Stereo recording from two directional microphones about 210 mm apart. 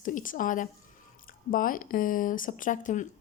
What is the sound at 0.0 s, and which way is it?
Speech, 40° left (ahead or behind).